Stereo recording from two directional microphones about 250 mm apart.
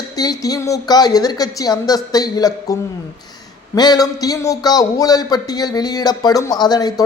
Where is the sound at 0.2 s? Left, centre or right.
Centre.